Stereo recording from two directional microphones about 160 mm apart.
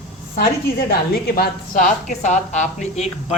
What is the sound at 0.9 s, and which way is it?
A woman's voice, 70° left (ahead or behind).